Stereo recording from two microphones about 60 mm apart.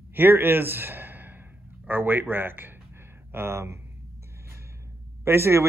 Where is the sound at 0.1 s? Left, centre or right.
Right.